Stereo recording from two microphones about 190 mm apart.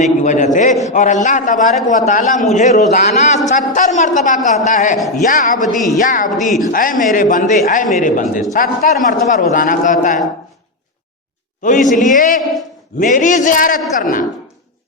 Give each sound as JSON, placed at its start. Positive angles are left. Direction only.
{"t": 0.0, "sound": "a man's voice", "side_deg": 40}
{"t": 4.9, "sound": "a woman's voice", "side_deg": 0}
{"t": 5.2, "sound": "a man's voice", "side_deg": 45}
{"t": 5.6, "sound": "a woman's voice", "side_deg": 0}
{"t": 6.0, "sound": "a man's voice", "side_deg": 45}
{"t": 11.6, "sound": "a man's voice", "side_deg": 40}